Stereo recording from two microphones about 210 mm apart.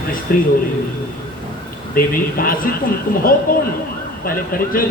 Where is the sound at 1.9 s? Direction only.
45° left (ahead or behind).